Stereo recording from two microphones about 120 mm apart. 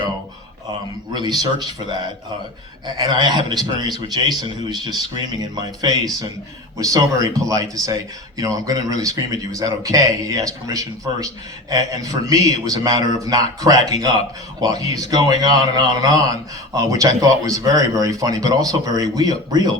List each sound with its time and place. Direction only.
1.1 s a man's voice: 35° right (ahead or behind)